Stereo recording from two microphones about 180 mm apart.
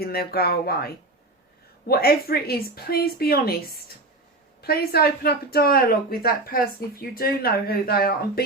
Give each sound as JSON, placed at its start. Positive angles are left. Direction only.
{"t": 0.0, "sound": "speech", "side_deg": 60}